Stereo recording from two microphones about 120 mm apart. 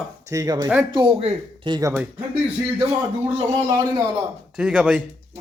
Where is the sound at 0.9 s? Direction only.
45° right (ahead or behind).